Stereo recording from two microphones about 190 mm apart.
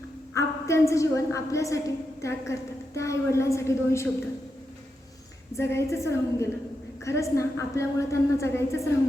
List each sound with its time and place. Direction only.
0.3 s a woman's voice: 15° left (ahead or behind)
5.5 s a woman's voice: 15° left (ahead or behind)